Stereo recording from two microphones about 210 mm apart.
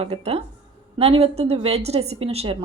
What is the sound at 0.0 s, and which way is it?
A woman's voice, 30° right (ahead or behind).